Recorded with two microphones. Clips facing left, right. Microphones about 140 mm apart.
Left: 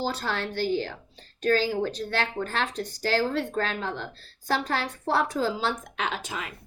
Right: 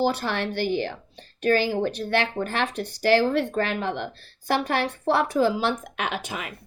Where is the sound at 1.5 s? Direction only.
15° right (ahead or behind).